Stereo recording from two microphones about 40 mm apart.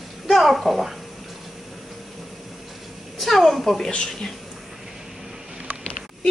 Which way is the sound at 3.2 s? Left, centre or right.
Centre.